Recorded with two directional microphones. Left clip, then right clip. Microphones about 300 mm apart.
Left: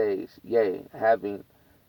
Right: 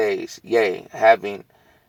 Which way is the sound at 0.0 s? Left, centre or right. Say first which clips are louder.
Right 5 dB; centre.